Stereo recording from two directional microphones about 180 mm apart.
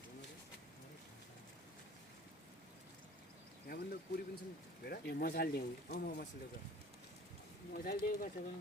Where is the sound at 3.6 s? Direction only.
60° left (ahead or behind).